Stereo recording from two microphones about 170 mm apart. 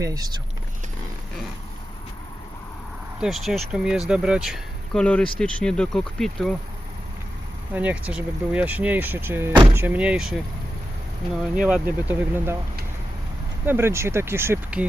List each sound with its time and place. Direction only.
0.0 s speech: 20° right (ahead or behind)
3.2 s speech: centre (ahead or behind)
7.7 s speech: 10° right (ahead or behind)
11.6 s speech: 10° right (ahead or behind)
13.7 s speech: 15° right (ahead or behind)